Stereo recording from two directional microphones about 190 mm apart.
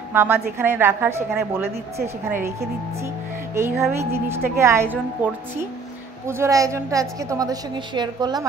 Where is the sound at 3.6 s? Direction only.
15° right (ahead or behind).